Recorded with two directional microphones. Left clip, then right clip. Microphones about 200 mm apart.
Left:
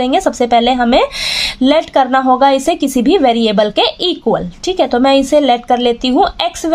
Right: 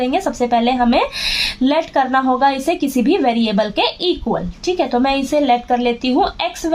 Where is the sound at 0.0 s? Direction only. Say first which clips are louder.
Left 5 dB; 45° left (ahead or behind).